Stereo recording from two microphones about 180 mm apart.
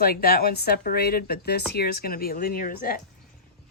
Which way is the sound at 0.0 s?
60° left (ahead or behind).